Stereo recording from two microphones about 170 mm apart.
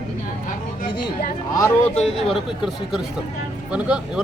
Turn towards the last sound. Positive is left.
turn(degrees=-5)  # may be behind; listen again after turning